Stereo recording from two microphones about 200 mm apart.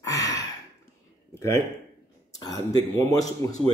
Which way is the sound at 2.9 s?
15° left (ahead or behind).